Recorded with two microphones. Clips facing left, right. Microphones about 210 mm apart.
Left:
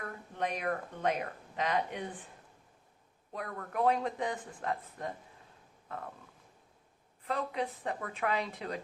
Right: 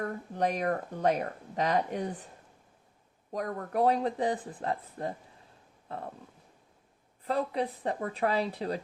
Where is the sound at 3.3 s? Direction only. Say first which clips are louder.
Right 7 dB; 40° right (ahead or behind).